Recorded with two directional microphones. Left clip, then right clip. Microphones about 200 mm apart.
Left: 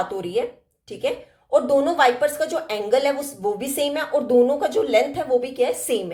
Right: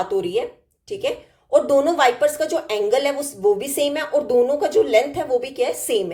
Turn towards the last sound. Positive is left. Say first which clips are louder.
# right 1 dB
turn(degrees=-10)  # may be behind; listen again after turning